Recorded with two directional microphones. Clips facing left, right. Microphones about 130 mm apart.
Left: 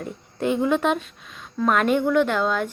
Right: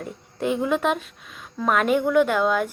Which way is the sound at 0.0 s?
Centre (ahead or behind).